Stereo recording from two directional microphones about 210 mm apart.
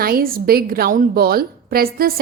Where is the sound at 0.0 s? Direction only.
45° right (ahead or behind).